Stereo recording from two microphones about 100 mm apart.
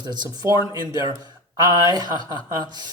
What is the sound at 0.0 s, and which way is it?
Speech, 45° right (ahead or behind).